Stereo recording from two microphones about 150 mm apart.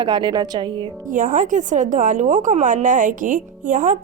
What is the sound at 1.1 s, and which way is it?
A woman's voice, 60° right (ahead or behind).